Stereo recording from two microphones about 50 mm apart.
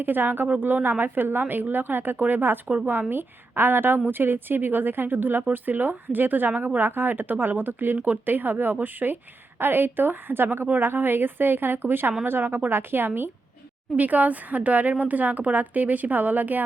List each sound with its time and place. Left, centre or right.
0.0 s a woman's voice: right
13.9 s speech: right